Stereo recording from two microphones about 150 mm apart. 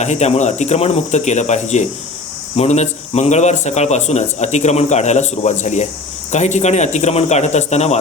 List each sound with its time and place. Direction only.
0.0 s a man's voice: 50° left (ahead or behind)